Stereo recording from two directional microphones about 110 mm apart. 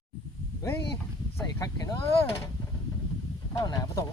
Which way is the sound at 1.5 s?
35° left (ahead or behind).